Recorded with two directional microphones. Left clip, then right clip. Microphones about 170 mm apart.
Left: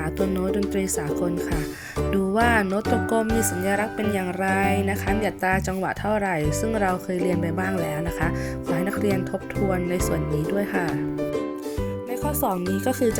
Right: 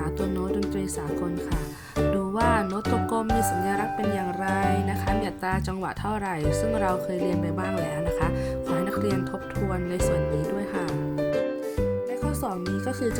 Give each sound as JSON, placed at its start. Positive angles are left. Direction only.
{"t": 2.0, "sound": "music", "side_deg": 10}
{"t": 2.4, "sound": "speech", "side_deg": 15}
{"t": 6.1, "sound": "speech", "side_deg": 15}
{"t": 8.7, "sound": "speech", "side_deg": 15}